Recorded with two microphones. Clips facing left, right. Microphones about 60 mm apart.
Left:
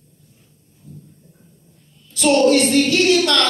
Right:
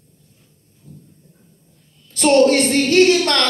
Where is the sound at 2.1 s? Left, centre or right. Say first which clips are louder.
Right 1 dB; right.